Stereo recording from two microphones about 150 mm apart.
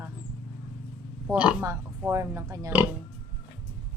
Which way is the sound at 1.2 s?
10° right (ahead or behind).